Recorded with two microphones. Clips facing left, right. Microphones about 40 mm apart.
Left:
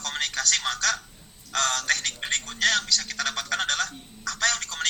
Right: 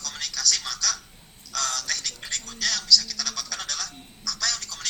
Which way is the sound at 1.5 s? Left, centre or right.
Left.